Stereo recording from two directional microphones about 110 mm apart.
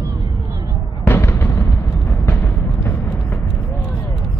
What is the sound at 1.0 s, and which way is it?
Fireworks, 20° left (ahead or behind).